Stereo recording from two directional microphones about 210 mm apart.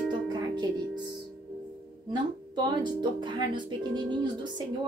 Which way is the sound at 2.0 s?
20° right (ahead or behind).